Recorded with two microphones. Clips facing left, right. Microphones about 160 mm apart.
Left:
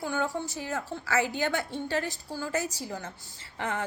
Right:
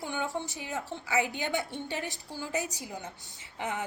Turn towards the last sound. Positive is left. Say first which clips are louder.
# left 2 dB
turn(degrees=-15)  # may be behind; listen again after turning